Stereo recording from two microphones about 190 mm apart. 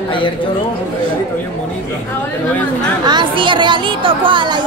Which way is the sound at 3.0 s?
25° right (ahead or behind).